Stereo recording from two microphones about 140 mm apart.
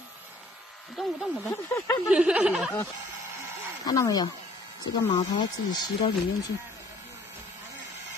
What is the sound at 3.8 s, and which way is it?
Speech, 25° left (ahead or behind).